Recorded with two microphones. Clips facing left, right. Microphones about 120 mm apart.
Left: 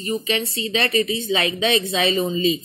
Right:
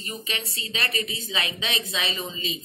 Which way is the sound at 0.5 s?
25° left (ahead or behind).